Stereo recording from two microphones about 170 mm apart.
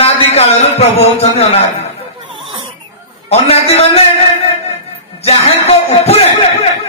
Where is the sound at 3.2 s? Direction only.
35° left (ahead or behind).